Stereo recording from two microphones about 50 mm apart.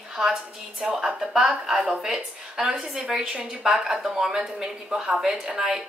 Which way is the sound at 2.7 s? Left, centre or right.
Centre.